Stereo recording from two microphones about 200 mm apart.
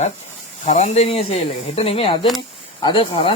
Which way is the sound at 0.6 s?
35° left (ahead or behind).